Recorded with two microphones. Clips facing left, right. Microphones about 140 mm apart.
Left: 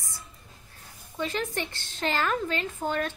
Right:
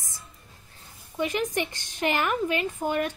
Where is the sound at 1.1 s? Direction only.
15° right (ahead or behind).